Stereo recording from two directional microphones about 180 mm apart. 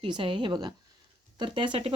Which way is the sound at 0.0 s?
30° right (ahead or behind).